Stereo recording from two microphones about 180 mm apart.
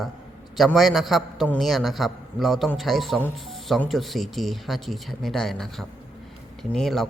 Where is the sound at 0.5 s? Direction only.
Centre (ahead or behind).